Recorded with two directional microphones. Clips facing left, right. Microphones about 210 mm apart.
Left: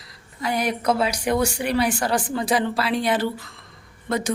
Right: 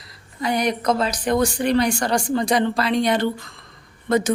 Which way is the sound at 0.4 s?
5° left (ahead or behind).